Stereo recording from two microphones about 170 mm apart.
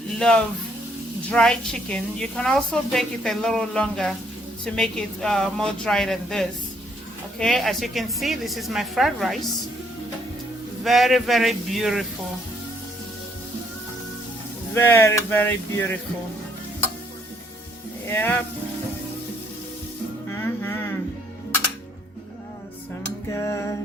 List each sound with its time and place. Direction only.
0.2 s a woman's voice: 5° left (ahead or behind)
10.8 s a woman's voice: centre (ahead or behind)
14.8 s speech: 15° left (ahead or behind)
18.1 s speech: 10° left (ahead or behind)
20.3 s music: 15° left (ahead or behind)
23.3 s speech: 15° left (ahead or behind)